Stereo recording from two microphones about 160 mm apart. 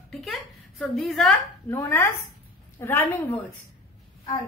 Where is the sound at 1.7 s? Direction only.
15° left (ahead or behind).